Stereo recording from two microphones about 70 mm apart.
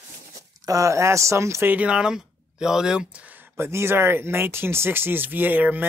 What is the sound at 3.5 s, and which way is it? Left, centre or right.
Speech, right.